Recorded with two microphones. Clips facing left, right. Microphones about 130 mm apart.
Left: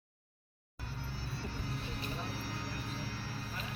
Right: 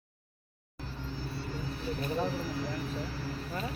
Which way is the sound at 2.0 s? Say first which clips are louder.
Right 9 dB; 60° right (ahead or behind).